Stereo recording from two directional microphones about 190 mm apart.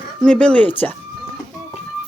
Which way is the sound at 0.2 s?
5° left (ahead or behind).